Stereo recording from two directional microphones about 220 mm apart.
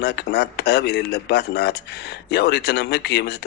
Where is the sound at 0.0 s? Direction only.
50° left (ahead or behind).